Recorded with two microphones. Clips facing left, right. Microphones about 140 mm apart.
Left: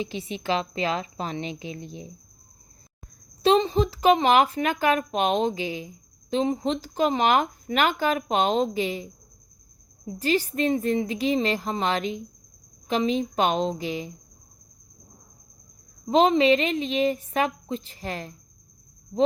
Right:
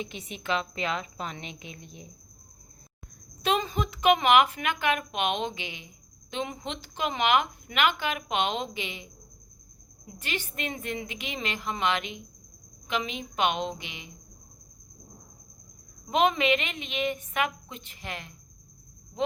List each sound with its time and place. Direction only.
0.0 s a woman's voice: 30° left (ahead or behind)
3.4 s a woman's voice: 30° left (ahead or behind)
10.1 s a woman's voice: 35° left (ahead or behind)
16.0 s a woman's voice: 30° left (ahead or behind)